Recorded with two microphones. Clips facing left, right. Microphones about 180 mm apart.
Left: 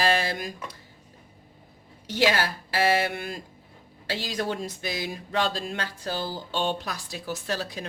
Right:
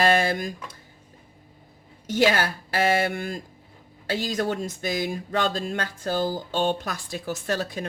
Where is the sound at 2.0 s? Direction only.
45° right (ahead or behind).